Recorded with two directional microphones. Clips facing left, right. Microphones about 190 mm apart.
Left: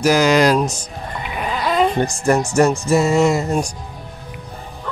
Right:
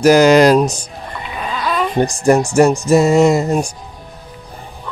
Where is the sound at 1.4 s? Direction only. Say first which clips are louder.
Left 2 dB; 20° left (ahead or behind).